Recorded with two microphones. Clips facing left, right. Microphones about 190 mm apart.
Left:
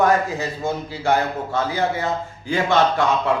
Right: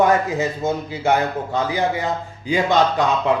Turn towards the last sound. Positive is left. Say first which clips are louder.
# right 1 dB
turn(degrees=-15)  # may be behind; listen again after turning